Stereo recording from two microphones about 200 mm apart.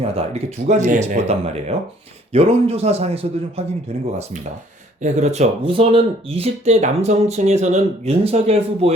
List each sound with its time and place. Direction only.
0.0 s speech: 30° right (ahead or behind)
5.0 s speech: 35° right (ahead or behind)